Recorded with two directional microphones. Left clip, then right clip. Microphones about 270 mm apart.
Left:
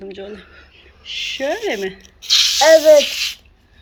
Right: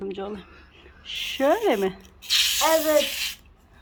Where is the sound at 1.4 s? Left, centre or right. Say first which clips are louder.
Right 2 dB; right.